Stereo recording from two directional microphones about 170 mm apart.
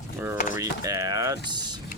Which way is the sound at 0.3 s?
50° left (ahead or behind).